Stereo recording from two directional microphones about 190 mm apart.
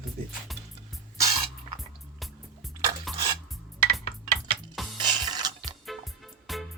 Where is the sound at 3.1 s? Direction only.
Centre (ahead or behind).